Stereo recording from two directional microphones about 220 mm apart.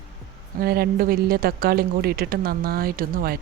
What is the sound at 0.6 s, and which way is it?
Speech, 45° right (ahead or behind).